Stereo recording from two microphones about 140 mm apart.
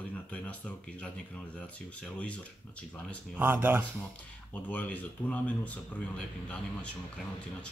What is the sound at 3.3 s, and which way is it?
Speech, 15° right (ahead or behind).